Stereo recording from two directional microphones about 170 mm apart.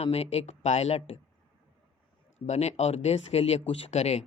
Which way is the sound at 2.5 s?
40° left (ahead or behind).